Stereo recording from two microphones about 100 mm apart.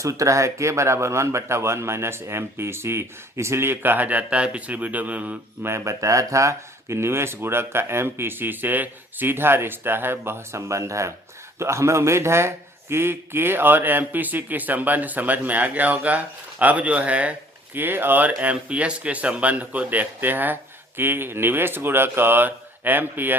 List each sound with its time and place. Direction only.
0.0 s a man's voice: 30° right (ahead or behind); by 5.7 s 15° right (ahead or behind)
5.7 s a man's voice: 30° right (ahead or behind)